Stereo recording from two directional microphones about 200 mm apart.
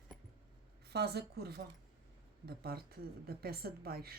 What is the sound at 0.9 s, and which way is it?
Speech, 55° right (ahead or behind).